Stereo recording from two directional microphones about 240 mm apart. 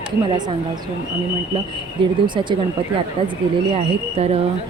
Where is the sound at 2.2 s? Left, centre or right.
Centre.